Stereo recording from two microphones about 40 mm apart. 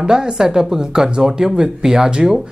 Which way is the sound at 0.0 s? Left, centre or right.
Centre.